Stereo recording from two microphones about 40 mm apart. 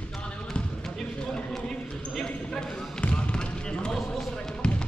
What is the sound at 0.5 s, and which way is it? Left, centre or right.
Basketball bounce, left.